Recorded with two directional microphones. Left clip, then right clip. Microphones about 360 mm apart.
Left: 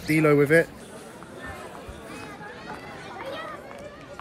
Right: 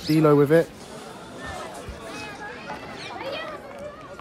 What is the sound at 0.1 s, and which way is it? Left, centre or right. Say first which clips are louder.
Speech: right 1 dB; centre.